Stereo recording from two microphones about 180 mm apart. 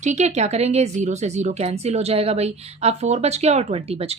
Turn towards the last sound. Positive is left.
turn(degrees=-35)  # may be behind; listen again after turning